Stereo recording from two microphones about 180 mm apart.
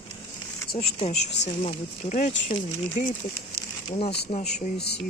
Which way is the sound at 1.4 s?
35° left (ahead or behind).